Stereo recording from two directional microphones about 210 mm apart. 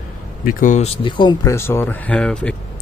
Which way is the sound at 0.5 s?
40° left (ahead or behind).